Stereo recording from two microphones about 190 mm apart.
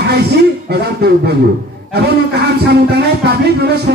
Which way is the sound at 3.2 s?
60° right (ahead or behind).